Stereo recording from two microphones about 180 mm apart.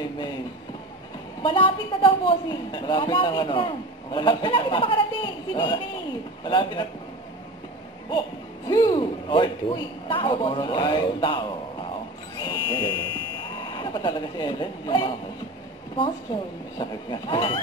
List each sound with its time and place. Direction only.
1.4 s a woman's voice: 30° left (ahead or behind)
8.6 s a woman's voice: 20° left (ahead or behind)
12.4 s music: 25° left (ahead or behind)
13.6 s speech: 25° left (ahead or behind)
16.7 s a woman's voice: 25° left (ahead or behind)